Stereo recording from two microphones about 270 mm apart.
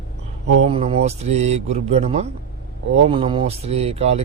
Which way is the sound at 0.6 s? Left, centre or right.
Right.